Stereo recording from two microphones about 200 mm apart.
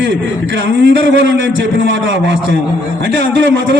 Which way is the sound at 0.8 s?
65° right (ahead or behind).